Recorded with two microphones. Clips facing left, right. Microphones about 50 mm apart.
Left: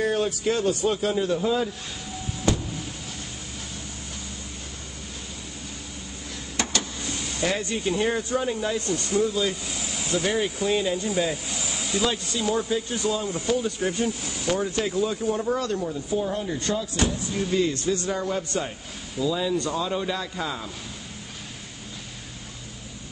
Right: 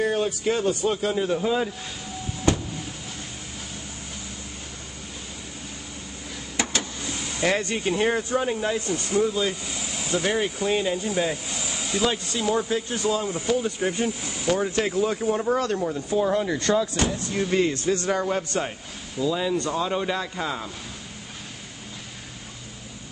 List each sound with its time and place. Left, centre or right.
0.0 s a man's voice: centre
1.2 s speech: right
6.5 s vehicle: centre
7.4 s speech: right
7.9 s speech: right
12.7 s speech: right
13.3 s speech: right
14.8 s speech: right
16.1 s speech: right
16.9 s speech: right
19.1 s speech: centre